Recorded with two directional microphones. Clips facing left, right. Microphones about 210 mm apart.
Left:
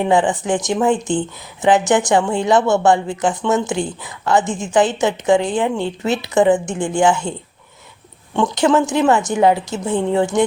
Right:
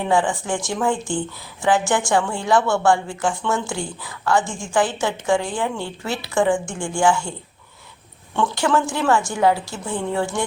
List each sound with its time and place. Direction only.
0.0 s a woman's voice: 20° left (ahead or behind)
8.4 s a woman's voice: 20° left (ahead or behind)